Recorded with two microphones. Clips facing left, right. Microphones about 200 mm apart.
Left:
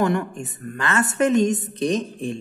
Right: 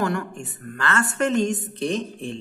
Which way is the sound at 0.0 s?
20° left (ahead or behind).